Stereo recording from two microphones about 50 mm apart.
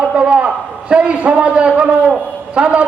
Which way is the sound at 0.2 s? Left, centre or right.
Right.